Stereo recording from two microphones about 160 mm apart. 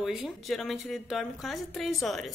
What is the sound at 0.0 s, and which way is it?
A woman's voice, centre (ahead or behind).